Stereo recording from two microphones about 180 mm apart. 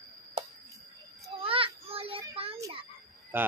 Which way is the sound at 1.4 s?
30° right (ahead or behind).